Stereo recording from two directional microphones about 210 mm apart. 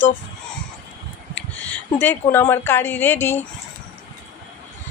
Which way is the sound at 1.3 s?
10° left (ahead or behind).